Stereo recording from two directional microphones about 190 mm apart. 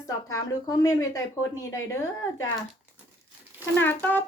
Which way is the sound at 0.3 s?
20° left (ahead or behind).